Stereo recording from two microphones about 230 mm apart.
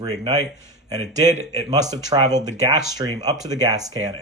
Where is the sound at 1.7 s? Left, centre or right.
Centre.